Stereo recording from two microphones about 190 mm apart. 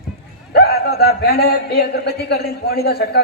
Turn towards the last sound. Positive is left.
turn(degrees=55)  # may be behind; listen again after turning